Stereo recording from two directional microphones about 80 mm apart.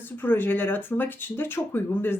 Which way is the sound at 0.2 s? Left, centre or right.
Left.